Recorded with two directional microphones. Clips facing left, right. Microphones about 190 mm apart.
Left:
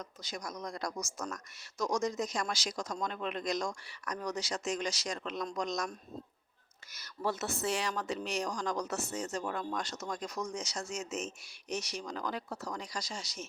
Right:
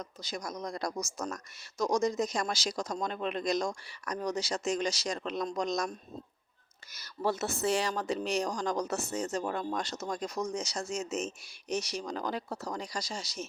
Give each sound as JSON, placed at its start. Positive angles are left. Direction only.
{"t": 0.0, "sound": "speech", "side_deg": -30}
{"t": 6.9, "sound": "speech", "side_deg": -35}